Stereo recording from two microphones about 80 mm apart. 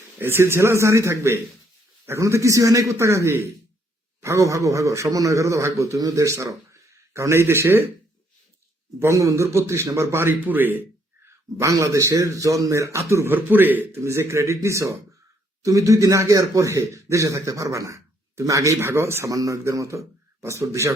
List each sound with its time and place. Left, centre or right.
0.2 s a man's voice: right
9.0 s a man's voice: right
11.5 s a man's voice: right
13.3 s a man's voice: right
14.0 s a man's voice: right